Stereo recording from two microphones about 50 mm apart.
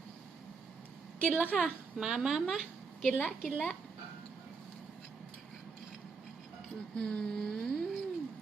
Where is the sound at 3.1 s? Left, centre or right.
Left.